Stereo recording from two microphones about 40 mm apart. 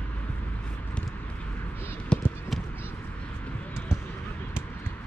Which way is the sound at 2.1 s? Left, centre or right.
Left.